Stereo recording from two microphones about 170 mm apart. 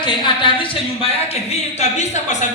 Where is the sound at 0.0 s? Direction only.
30° left (ahead or behind).